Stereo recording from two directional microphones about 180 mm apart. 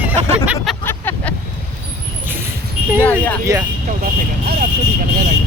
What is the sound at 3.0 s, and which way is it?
Vehicle, 10° left (ahead or behind).